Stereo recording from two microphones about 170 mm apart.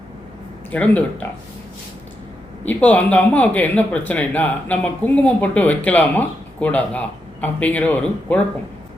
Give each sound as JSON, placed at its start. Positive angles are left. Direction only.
{"t": 0.7, "sound": "speech", "side_deg": 10}
{"t": 2.6, "sound": "speech", "side_deg": 10}